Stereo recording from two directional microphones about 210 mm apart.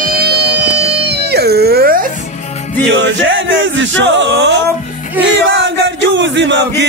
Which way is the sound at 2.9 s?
60° right (ahead or behind).